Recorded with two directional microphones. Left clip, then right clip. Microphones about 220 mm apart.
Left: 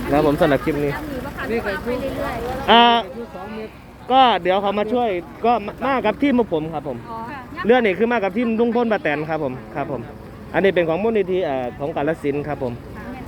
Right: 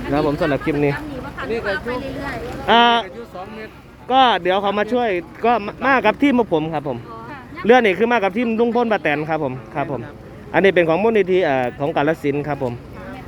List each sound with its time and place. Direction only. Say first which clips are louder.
0.1 s speech: left 3 dB; centre (ahead or behind)
1.6 s speech: right 1 dB; 40° right (ahead or behind)
2.6 s speech: left 1 dB; 10° right (ahead or behind)
4.1 s speech: even; 10° right (ahead or behind)
6.5 s speech: right 3 dB; 30° right (ahead or behind)
7.7 s speech: right 3 dB; 15° right (ahead or behind)
12.0 s speech: right 2 dB; 20° right (ahead or behind)